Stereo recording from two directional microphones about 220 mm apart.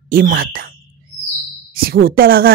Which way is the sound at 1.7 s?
45° right (ahead or behind).